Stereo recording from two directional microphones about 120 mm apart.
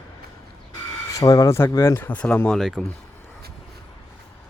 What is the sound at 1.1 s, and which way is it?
Speech, 25° left (ahead or behind).